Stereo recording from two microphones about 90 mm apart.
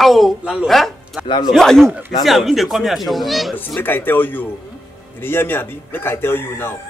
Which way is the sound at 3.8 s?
20° left (ahead or behind).